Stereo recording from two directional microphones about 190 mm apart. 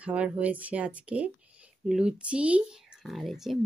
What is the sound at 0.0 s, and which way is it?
Speech, 5° right (ahead or behind).